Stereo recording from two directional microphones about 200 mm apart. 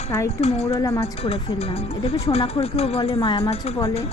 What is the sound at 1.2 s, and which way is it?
Speech, 30° left (ahead or behind).